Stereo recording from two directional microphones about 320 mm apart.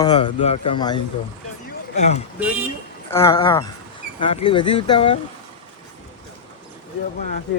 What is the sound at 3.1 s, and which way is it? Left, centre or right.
A man's voice, centre.